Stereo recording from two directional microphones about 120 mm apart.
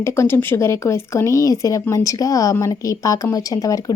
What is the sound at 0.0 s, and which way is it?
Speech, 20° left (ahead or behind).